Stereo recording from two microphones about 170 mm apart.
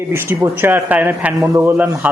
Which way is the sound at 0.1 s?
15° right (ahead or behind).